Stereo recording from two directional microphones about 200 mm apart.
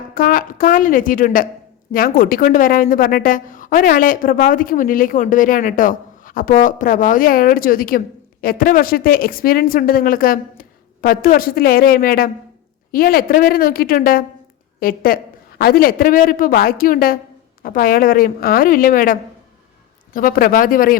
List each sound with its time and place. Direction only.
0.1 s a woman's voice: 45° left (ahead or behind)